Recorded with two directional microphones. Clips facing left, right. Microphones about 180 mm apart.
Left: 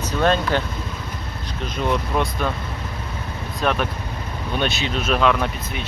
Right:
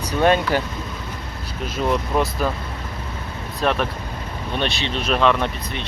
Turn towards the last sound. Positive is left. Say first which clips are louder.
# even
turn(degrees=5)  # may be behind; listen again after turning